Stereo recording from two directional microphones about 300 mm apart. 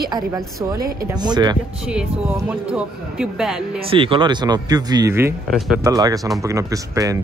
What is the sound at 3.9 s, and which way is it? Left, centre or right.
Speech, centre.